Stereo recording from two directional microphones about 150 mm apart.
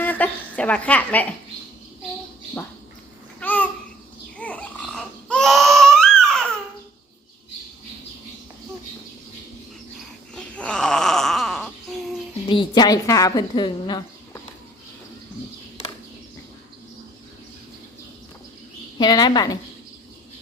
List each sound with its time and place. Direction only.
0.0 s a woman's voice: 10° left (ahead or behind)
3.4 s babbling: 10° left (ahead or behind)
4.4 s baby cry: 10° left (ahead or behind)
10.3 s wail: 5° left (ahead or behind)
12.5 s a woman's voice: 30° left (ahead or behind)
18.9 s a woman's voice: 30° left (ahead or behind)